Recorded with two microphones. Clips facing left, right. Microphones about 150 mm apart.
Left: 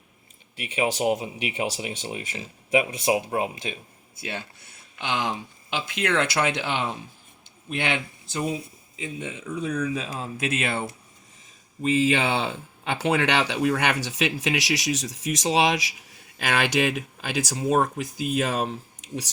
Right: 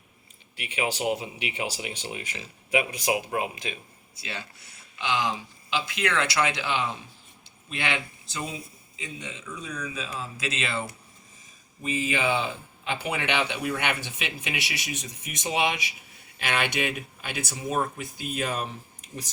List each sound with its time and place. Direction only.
0.8 s speech: 40° left (ahead or behind)
4.1 s speech: 50° left (ahead or behind)
11.8 s speech: 90° left